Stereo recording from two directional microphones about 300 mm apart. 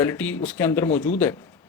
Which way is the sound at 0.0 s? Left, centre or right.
Centre.